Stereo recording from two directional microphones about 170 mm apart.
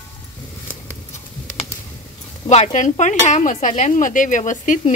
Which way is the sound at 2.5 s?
45° left (ahead or behind).